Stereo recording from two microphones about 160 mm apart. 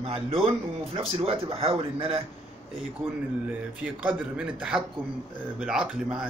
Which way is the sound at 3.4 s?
10° right (ahead or behind).